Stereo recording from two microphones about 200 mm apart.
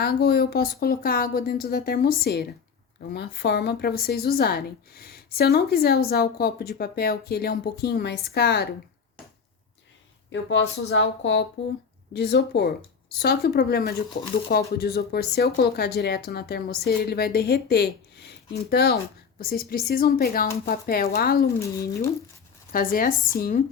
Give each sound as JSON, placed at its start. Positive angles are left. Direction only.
{"t": 0.0, "sound": "a woman's voice", "side_deg": 50}
{"t": 10.2, "sound": "a woman's voice", "side_deg": 65}
{"t": 21.6, "sound": "speech", "side_deg": 15}
{"t": 22.7, "sound": "a woman's voice", "side_deg": 45}